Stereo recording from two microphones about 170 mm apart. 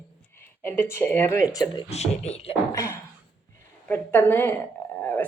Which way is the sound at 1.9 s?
40° left (ahead or behind).